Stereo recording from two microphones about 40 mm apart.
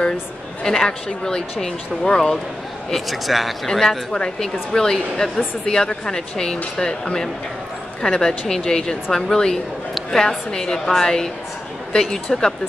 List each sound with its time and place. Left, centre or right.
0.7 s speech: centre
2.9 s speech: centre